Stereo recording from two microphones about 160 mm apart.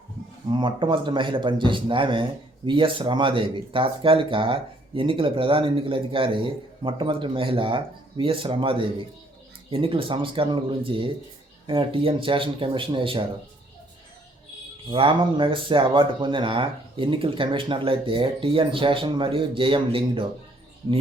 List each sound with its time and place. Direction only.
0.5 s speech: 30° right (ahead or behind)
14.8 s speech: 35° right (ahead or behind)